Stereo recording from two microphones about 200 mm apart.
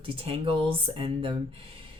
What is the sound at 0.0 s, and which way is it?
Speech, 25° right (ahead or behind).